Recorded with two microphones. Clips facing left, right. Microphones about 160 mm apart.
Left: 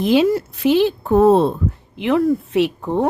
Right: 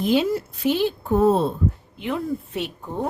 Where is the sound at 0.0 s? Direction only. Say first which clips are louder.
Left 5 dB; 90° left.